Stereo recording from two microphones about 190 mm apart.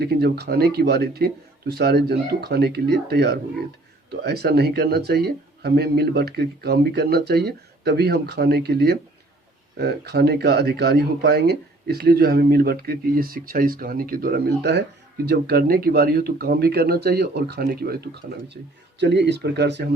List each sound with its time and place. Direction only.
0.0 s speech: 55° right (ahead or behind)